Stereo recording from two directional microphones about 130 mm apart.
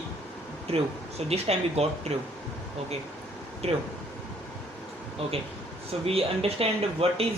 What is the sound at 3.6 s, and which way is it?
Speech, 55° right (ahead or behind).